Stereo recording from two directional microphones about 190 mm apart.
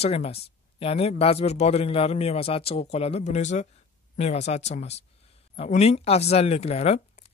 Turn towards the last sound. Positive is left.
turn(degrees=35)  # may be behind; listen again after turning